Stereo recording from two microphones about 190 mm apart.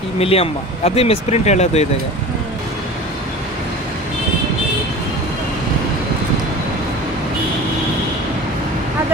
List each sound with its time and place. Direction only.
0.2 s speech: 30° left (ahead or behind)